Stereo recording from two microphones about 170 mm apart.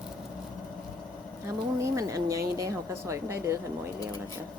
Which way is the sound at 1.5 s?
20° right (ahead or behind).